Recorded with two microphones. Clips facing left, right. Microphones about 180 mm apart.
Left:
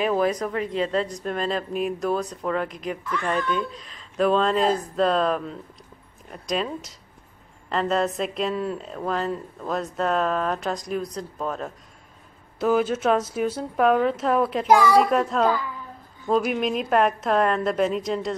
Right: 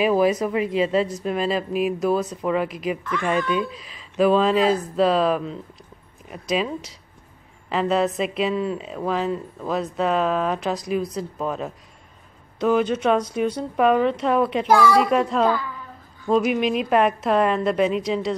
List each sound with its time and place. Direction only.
0.0 s a woman's voice: 10° right (ahead or behind)
14.7 s speech: 15° left (ahead or behind)
15.0 s speech: centre (ahead or behind)